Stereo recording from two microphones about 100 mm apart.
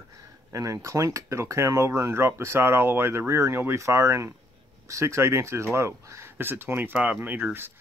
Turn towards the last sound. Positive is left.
turn(degrees=-20)  # may be behind; listen again after turning